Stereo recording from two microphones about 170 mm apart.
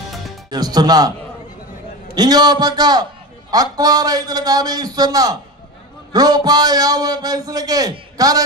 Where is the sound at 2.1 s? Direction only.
25° right (ahead or behind).